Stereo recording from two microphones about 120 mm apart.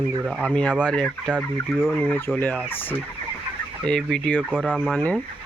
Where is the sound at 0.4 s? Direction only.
10° left (ahead or behind).